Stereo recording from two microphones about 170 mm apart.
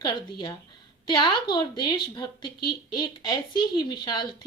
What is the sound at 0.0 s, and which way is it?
A woman's voice, 25° left (ahead or behind).